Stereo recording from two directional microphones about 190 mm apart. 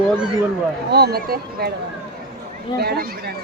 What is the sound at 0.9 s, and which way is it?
Speech, 60° right (ahead or behind).